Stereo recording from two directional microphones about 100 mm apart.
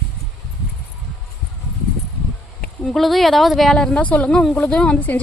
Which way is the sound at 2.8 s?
5° left (ahead or behind).